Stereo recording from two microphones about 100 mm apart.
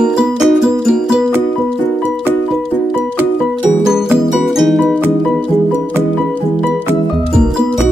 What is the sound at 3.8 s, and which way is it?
Music, 5° right (ahead or behind).